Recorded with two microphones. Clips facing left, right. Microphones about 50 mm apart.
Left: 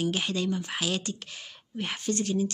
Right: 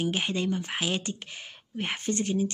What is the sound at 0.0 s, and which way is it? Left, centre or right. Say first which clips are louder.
Speech: even; right.